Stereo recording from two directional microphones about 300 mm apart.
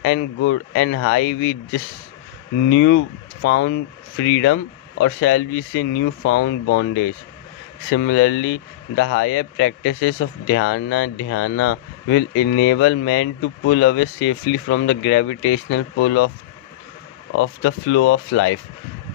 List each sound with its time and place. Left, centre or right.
0.0 s speech: left
2.7 s speech: left
7.9 s speech: left
17.3 s speech: left